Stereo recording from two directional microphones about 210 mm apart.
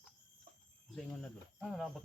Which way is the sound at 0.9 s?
Centre (ahead or behind).